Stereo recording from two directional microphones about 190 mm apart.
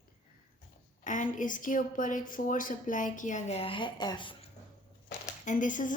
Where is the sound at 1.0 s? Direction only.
40° left (ahead or behind); by 4.4 s 25° left (ahead or behind).